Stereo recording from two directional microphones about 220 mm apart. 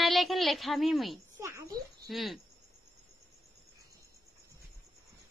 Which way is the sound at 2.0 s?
Centre (ahead or behind).